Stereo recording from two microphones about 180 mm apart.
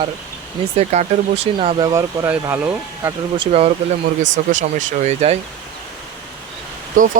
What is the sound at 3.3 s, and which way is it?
Speech, 30° right (ahead or behind).